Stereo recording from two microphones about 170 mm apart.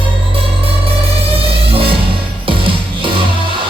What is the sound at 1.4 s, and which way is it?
Music, 35° right (ahead or behind).